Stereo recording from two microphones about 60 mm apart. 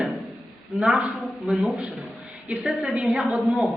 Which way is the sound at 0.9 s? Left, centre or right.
Right.